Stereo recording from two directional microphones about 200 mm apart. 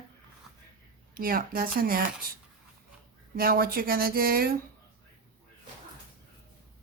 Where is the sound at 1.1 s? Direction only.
45° right (ahead or behind).